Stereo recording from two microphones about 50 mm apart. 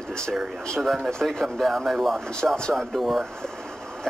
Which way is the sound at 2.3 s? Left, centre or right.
Centre.